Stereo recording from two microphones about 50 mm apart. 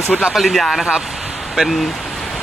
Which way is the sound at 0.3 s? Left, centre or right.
Centre.